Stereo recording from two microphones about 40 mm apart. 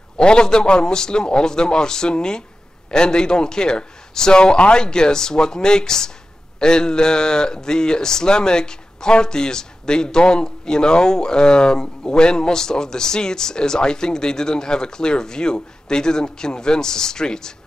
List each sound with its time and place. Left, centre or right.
0.2 s a man's voice: left